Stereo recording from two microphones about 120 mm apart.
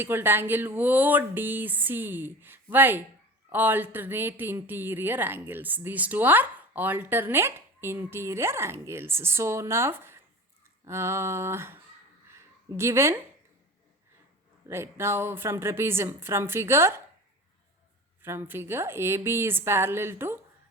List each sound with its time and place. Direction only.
0.0 s speech: 20° right (ahead or behind)
14.7 s speech: 20° right (ahead or behind)
18.2 s speech: 20° right (ahead or behind)